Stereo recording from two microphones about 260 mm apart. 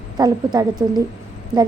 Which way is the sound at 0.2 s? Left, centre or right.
Centre.